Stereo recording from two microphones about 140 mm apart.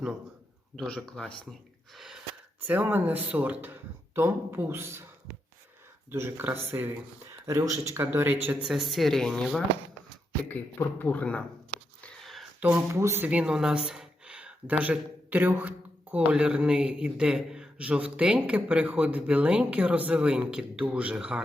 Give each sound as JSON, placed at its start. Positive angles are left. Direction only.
{"t": 0.8, "sound": "speech", "side_deg": 5}
{"t": 2.0, "sound": "gasp", "side_deg": -5}
{"t": 2.6, "sound": "a man's voice", "side_deg": -15}
{"t": 6.1, "sound": "a man's voice", "side_deg": -15}
{"t": 8.6, "sound": "speech", "side_deg": 0}
{"t": 12.0, "sound": "a sound", "side_deg": 0}
{"t": 12.5, "sound": "a man's voice", "side_deg": -10}